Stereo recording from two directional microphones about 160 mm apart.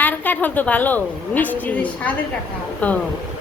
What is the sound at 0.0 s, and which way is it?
A woman's voice, 10° left (ahead or behind).